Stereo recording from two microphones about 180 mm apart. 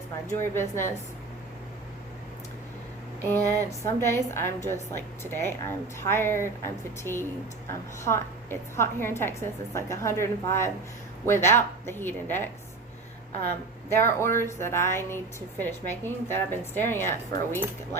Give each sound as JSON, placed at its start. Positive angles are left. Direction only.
{"t": 0.3, "sound": "a woman's voice", "side_deg": 15}
{"t": 3.8, "sound": "a woman's voice", "side_deg": 15}
{"t": 13.9, "sound": "a woman's voice", "side_deg": 15}